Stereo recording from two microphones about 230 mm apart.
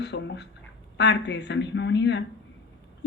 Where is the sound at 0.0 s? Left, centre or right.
Left.